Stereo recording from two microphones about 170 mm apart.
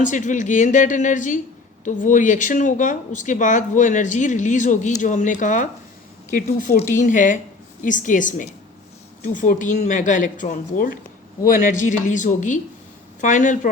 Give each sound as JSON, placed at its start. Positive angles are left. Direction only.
{"t": 0.0, "sound": "speech", "side_deg": 50}